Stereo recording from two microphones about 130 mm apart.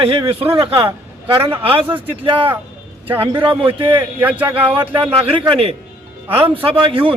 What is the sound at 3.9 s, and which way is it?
Speech, 15° right (ahead or behind).